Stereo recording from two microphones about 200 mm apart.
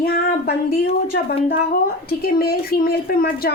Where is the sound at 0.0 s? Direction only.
50° left (ahead or behind).